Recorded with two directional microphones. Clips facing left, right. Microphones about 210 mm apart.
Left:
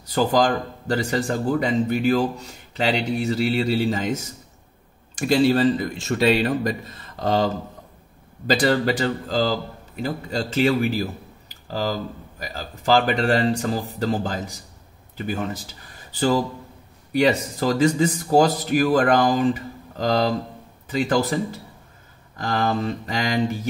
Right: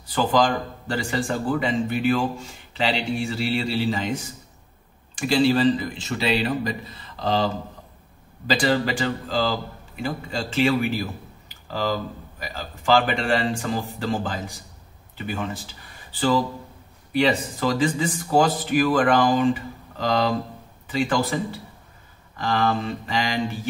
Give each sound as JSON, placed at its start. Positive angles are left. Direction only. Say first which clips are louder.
{"t": 0.1, "sound": "a man's voice", "louder": "left 1 dB", "side_deg": 40}
{"t": 17.1, "sound": "speech", "louder": "left 2 dB", "side_deg": 45}